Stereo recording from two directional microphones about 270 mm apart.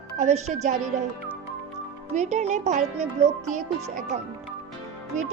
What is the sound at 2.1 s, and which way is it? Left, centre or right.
Speech, right.